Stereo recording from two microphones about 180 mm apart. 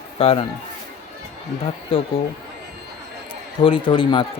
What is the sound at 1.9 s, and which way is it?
Speech, 30° left (ahead or behind).